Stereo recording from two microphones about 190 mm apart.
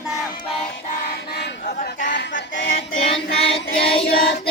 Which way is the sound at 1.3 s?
60° left (ahead or behind).